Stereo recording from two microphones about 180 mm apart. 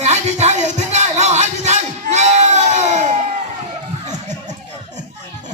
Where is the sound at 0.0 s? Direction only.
40° right (ahead or behind).